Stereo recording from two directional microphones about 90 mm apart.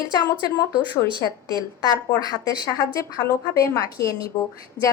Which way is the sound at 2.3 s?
45° left (ahead or behind).